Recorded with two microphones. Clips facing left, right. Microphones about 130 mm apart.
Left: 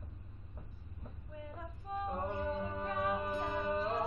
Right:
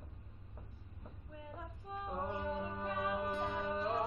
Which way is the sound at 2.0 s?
10° right (ahead or behind).